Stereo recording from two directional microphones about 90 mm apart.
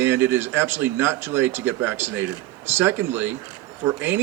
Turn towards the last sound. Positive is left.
turn(degrees=-25)  # may be behind; listen again after turning